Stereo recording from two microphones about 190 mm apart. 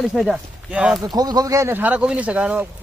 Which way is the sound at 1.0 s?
20° right (ahead or behind).